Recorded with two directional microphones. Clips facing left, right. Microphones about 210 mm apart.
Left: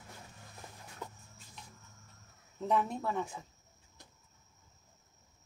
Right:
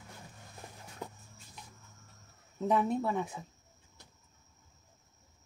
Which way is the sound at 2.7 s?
5° right (ahead or behind).